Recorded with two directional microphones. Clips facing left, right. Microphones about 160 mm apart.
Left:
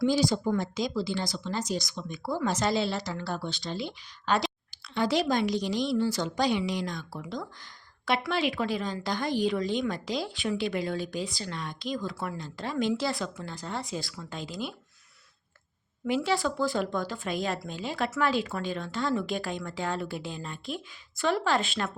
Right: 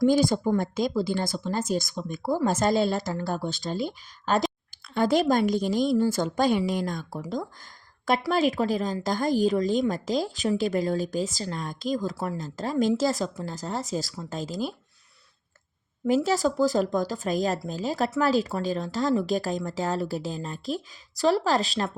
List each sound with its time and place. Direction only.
0.0 s speech: 50° right (ahead or behind)
12.7 s speech: 30° right (ahead or behind)
13.0 s speech: 40° right (ahead or behind)
16.0 s speech: 40° right (ahead or behind)